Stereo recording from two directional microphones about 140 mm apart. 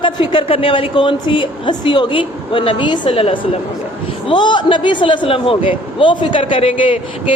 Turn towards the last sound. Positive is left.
turn(degrees=40)  # may be behind; listen again after turning